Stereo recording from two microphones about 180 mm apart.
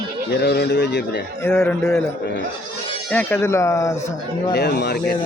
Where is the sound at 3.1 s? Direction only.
10° left (ahead or behind).